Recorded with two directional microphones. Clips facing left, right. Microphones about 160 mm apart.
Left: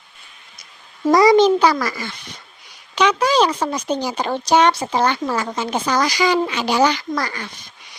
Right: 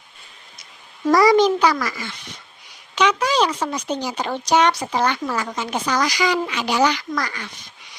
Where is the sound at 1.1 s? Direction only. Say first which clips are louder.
Left 2 dB; 20° left (ahead or behind).